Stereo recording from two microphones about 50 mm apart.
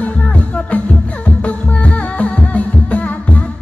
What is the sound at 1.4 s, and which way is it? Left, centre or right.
Music, left.